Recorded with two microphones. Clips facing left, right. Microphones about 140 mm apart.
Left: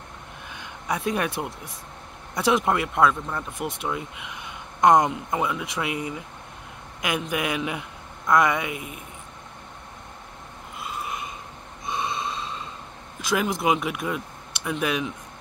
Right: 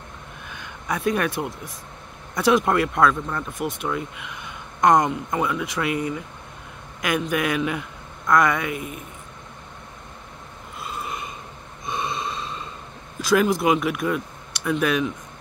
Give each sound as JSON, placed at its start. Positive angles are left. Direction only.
{"t": 0.8, "sound": "speech", "side_deg": 15}
{"t": 2.6, "sound": "speech", "side_deg": 15}
{"t": 11.9, "sound": "a sound", "side_deg": 15}
{"t": 13.2, "sound": "speech", "side_deg": 20}